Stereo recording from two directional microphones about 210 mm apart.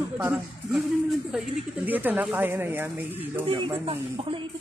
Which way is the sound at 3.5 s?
25° right (ahead or behind).